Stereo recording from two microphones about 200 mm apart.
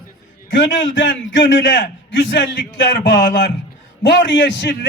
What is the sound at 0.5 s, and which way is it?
A man's voice, 65° left (ahead or behind).